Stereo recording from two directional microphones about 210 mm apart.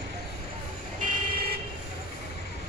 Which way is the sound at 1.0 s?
40° right (ahead or behind).